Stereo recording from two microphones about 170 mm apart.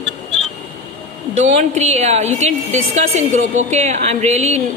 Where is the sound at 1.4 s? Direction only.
40° right (ahead or behind).